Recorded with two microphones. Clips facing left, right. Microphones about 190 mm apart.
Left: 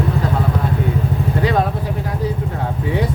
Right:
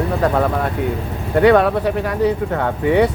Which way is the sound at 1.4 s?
65° right (ahead or behind).